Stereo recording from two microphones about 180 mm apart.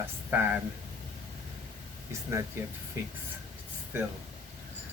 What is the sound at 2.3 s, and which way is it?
Speech, 15° right (ahead or behind).